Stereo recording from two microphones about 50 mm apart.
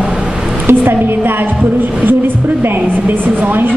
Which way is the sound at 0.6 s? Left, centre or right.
Right.